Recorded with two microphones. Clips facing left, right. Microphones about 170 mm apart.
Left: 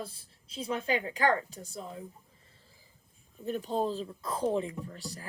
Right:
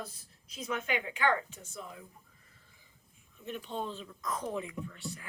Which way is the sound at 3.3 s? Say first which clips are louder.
Left 7 dB; 35° left (ahead or behind).